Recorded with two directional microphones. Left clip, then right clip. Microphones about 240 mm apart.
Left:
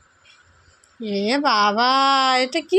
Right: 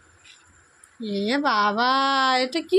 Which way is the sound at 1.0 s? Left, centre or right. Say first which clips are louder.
Left 3 dB; centre.